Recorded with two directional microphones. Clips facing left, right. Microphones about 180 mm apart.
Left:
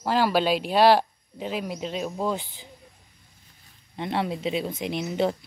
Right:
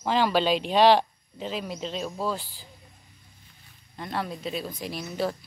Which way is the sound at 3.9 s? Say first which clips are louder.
Left 5 dB; 25° left (ahead or behind).